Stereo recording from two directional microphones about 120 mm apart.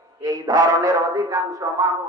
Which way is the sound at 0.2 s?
30° right (ahead or behind).